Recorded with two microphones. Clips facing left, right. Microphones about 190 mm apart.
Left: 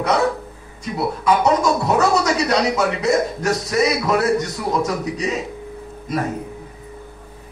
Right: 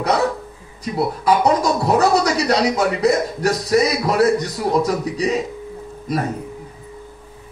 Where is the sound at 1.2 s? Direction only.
35° right (ahead or behind).